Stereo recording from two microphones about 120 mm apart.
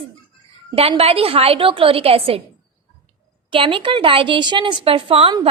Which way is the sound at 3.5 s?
45° right (ahead or behind).